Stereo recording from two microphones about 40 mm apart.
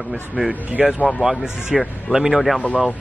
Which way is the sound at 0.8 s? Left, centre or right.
Centre.